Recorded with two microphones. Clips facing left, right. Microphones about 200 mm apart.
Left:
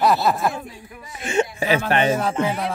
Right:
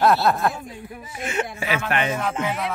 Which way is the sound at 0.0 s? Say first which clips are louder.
Even; centre (ahead or behind).